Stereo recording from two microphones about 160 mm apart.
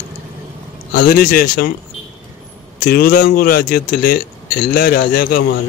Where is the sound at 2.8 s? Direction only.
65° left (ahead or behind).